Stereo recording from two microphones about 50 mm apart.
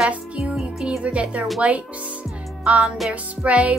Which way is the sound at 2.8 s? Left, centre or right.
Centre.